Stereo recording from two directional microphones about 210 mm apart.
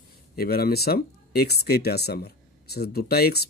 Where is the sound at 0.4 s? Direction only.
45° left (ahead or behind).